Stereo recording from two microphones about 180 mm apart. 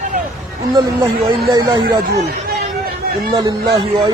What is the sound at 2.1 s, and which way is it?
Speech, 60° right (ahead or behind).